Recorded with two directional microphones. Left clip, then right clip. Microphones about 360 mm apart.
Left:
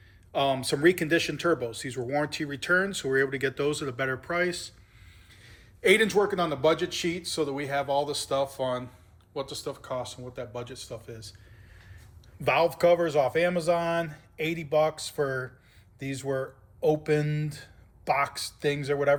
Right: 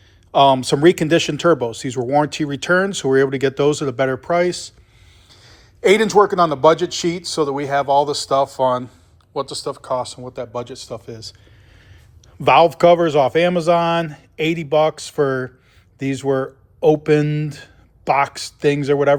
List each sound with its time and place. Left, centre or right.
0.3 s speech: centre
12.4 s speech: centre